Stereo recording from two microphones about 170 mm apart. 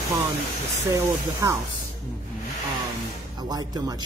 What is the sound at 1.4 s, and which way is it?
Speech, 15° right (ahead or behind).